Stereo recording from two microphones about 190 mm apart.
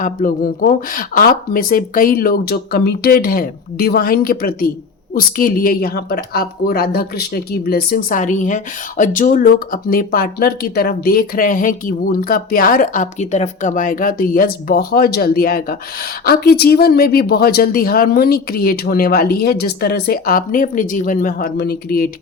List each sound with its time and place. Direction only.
0.0 s a woman's voice: 45° left (ahead or behind)